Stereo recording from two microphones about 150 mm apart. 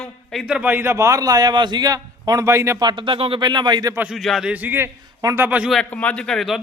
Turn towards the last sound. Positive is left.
turn(degrees=5)  # may be behind; listen again after turning